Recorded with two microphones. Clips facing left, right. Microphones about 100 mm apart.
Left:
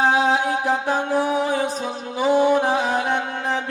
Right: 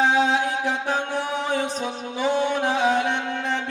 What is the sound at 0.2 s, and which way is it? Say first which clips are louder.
Music: left 2 dB; 40° left (ahead or behind).